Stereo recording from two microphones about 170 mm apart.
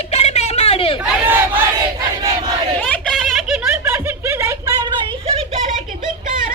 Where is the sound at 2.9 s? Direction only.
5° left (ahead or behind).